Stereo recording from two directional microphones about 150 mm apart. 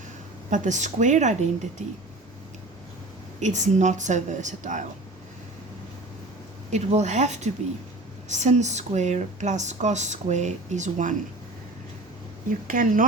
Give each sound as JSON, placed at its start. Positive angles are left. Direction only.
{"t": 0.5, "sound": "speech", "side_deg": -55}
{"t": 3.4, "sound": "a woman's voice", "side_deg": -50}
{"t": 6.7, "sound": "speech", "side_deg": -50}
{"t": 12.5, "sound": "a woman's voice", "side_deg": -65}